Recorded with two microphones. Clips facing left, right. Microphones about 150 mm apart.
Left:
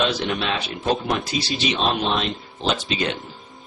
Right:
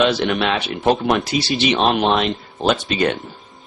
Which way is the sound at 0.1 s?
70° right (ahead or behind).